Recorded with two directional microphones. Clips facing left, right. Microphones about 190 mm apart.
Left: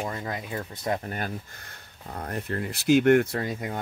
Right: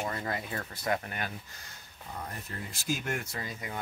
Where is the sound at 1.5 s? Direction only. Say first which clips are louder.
Left 3 dB; 60° left (ahead or behind).